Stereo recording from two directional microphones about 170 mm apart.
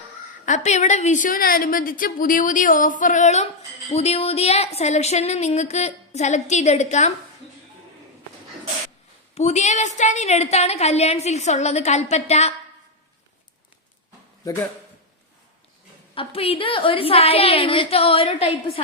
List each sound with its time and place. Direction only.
0.4 s a woman's voice: 45° left (ahead or behind)
9.3 s a woman's voice: 40° left (ahead or behind)
16.1 s a woman's voice: 35° left (ahead or behind)